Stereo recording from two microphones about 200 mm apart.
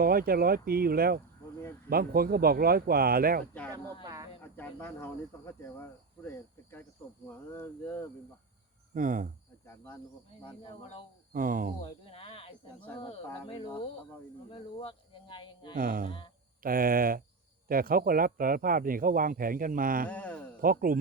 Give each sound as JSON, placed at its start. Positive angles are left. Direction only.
{"t": 0.0, "sound": "speech", "side_deg": -45}
{"t": 4.0, "sound": "a sound", "side_deg": -15}
{"t": 4.5, "sound": "speech", "side_deg": 10}
{"t": 9.0, "sound": "speech", "side_deg": -45}
{"t": 9.6, "sound": "speech", "side_deg": 15}
{"t": 10.6, "sound": "speech", "side_deg": 25}
{"t": 11.3, "sound": "speech", "side_deg": -45}
{"t": 11.8, "sound": "a sound", "side_deg": 30}
{"t": 13.4, "sound": "speech", "side_deg": 25}
{"t": 15.7, "sound": "speech", "side_deg": -45}
{"t": 20.1, "sound": "speech", "side_deg": 5}
{"t": 20.6, "sound": "speech", "side_deg": -45}